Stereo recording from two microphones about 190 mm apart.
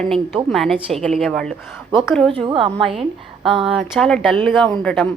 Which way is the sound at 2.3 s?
25° right (ahead or behind).